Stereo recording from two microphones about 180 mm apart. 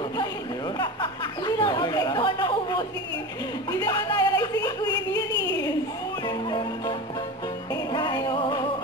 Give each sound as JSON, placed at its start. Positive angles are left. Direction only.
{"t": 0.7, "sound": "chatter", "side_deg": 25}
{"t": 3.8, "sound": "music", "side_deg": 25}
{"t": 6.2, "sound": "music", "side_deg": 25}